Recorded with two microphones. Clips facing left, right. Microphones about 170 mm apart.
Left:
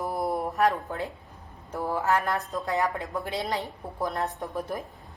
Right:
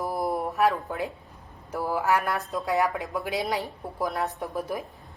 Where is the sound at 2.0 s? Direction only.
15° right (ahead or behind).